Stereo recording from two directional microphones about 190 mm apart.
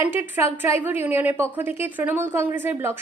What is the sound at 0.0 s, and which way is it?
A woman's voice, 10° right (ahead or behind).